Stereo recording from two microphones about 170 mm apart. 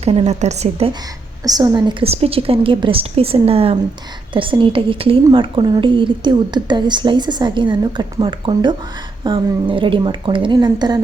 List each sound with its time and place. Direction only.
0.0 s a woman's voice: 35° right (ahead or behind)
1.5 s a woman's voice: 20° right (ahead or behind)